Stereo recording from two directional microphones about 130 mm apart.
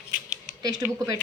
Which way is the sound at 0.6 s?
30° right (ahead or behind).